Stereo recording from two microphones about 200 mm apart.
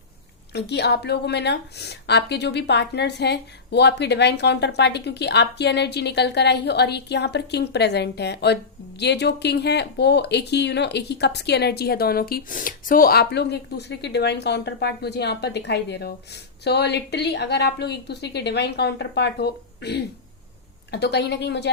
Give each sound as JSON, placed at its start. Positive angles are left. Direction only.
{"t": 0.5, "sound": "speech", "side_deg": 55}